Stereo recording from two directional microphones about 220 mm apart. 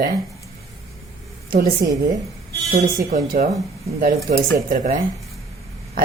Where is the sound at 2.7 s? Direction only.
40° right (ahead or behind).